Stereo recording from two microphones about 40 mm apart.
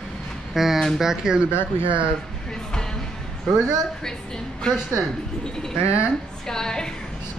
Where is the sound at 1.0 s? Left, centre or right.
Centre.